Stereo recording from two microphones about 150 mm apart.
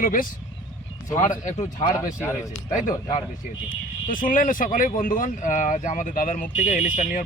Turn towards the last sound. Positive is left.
turn(degrees=55)  # may be behind; listen again after turning